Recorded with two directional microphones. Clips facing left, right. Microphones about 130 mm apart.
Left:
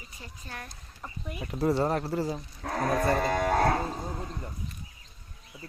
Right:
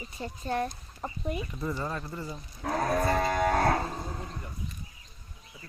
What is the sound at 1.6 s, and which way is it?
Speech, 70° left (ahead or behind).